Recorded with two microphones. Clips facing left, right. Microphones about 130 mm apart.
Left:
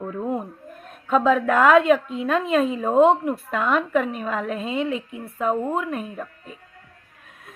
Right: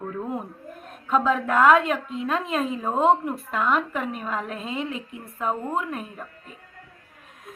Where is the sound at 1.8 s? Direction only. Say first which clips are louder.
Left 7 dB; centre (ahead or behind).